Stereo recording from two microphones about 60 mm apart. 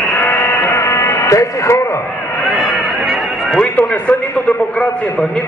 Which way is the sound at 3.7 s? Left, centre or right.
Left.